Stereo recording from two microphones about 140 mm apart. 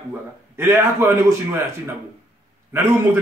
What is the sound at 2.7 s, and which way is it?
Speech, 20° right (ahead or behind).